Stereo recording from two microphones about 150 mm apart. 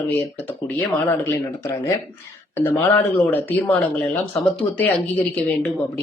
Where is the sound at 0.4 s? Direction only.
10° left (ahead or behind).